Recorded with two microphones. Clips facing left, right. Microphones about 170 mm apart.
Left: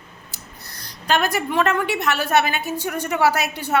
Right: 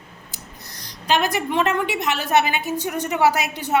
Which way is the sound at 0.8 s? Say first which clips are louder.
Even; 15° right (ahead or behind).